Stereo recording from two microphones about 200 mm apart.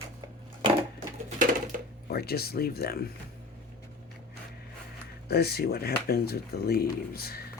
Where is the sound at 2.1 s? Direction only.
50° left (ahead or behind).